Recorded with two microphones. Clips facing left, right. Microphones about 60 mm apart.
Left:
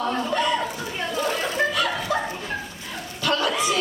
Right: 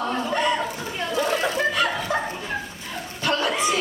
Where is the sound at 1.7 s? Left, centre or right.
Right.